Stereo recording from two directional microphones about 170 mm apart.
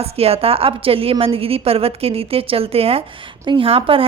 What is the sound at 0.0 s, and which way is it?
A woman's voice, 35° right (ahead or behind).